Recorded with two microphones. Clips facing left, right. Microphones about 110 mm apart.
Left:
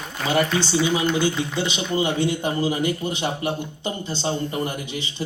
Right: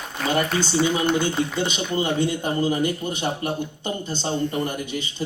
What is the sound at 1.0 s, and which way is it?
Speech, 50° right (ahead or behind).